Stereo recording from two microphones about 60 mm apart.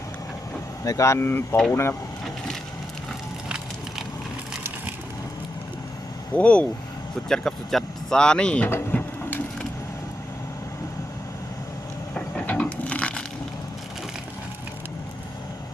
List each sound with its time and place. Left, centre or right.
0.9 s speech: left
1.2 s speech: left
6.3 s speech: centre
7.3 s speech: centre
8.2 s speech: centre
8.6 s printer: left
12.1 s crushing: left